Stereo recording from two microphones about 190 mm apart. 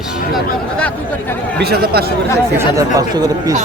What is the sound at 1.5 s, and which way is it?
Speech, 55° right (ahead or behind).